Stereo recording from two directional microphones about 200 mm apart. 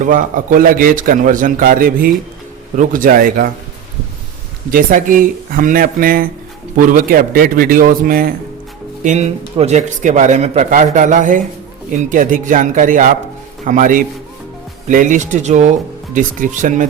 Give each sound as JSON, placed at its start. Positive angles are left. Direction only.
{"t": 0.0, "sound": "a man's voice", "side_deg": -40}
{"t": 4.7, "sound": "a man's voice", "side_deg": -40}
{"t": 9.0, "sound": "speech", "side_deg": -35}